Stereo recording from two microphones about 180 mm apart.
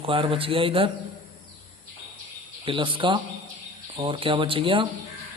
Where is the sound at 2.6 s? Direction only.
30° right (ahead or behind).